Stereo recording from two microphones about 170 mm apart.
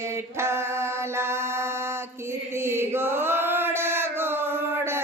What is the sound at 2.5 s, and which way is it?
Chant, 15° right (ahead or behind).